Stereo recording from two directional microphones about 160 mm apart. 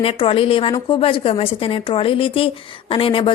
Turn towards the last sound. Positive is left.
turn(degrees=35)  # may be behind; listen again after turning